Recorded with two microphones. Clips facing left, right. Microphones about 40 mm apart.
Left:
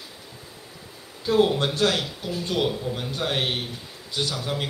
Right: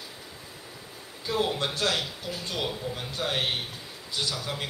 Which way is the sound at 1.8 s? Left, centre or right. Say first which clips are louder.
Left 4 dB; centre.